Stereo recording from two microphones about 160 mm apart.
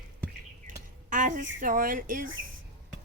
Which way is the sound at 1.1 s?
55° right (ahead or behind).